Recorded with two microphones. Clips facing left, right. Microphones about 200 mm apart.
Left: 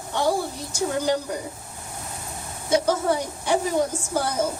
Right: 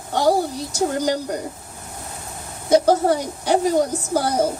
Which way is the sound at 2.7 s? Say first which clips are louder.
Right 6 dB; 40° right (ahead or behind).